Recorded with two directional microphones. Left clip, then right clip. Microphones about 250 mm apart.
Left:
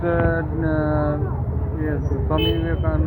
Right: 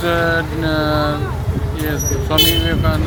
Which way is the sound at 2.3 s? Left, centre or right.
Right.